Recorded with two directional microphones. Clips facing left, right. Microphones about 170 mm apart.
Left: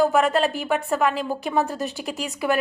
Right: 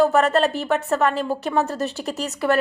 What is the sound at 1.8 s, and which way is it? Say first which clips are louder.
Speech: right 3 dB; 40° right (ahead or behind).